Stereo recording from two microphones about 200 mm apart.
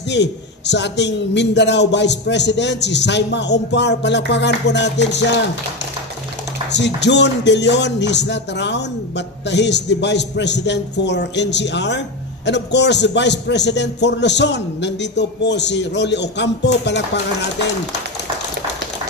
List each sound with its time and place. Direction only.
0.1 s a man's voice: 60° left (ahead or behind)
6.7 s a man's voice: 60° left (ahead or behind)